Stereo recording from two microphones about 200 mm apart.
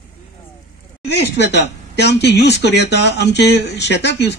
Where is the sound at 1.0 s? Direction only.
60° left (ahead or behind).